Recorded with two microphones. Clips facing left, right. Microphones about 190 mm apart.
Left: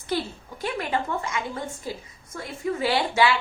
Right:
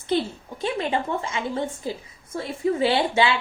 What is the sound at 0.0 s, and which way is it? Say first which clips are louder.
A woman's voice: right 4 dB; 25° right (ahead or behind).